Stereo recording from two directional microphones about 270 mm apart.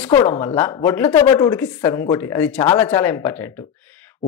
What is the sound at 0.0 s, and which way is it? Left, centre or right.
A man's voice, centre.